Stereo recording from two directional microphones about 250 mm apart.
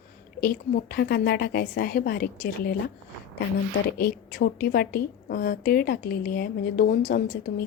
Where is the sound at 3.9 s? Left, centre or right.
Left.